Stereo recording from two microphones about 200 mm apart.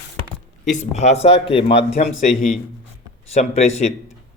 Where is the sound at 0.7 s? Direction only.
35° left (ahead or behind).